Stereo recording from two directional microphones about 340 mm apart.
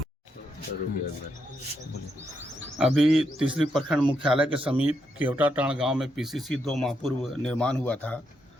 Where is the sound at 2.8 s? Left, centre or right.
Centre.